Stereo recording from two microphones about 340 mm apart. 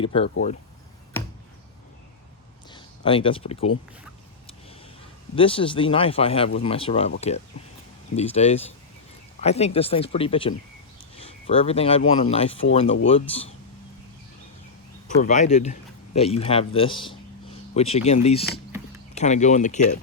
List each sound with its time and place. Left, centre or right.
0.0 s speech: centre
2.6 s speech: centre
5.3 s speech: centre
15.0 s speech: left